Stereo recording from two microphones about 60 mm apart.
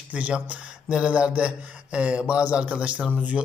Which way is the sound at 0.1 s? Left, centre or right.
Right.